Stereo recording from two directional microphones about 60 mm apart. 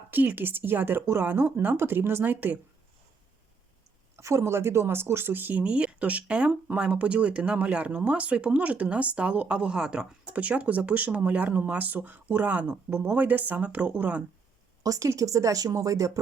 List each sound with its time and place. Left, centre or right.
0.1 s speech: right
4.2 s speech: right; by 10.2 s centre
10.3 s speech: right
14.8 s speech: right